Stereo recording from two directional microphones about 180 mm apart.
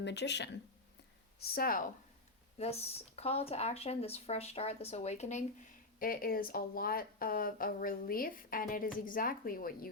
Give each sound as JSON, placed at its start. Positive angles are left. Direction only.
{"t": 0.0, "sound": "speech", "side_deg": 75}
{"t": 1.4, "sound": "speech", "side_deg": 60}
{"t": 2.6, "sound": "speech", "side_deg": 35}
{"t": 6.0, "sound": "speech", "side_deg": 55}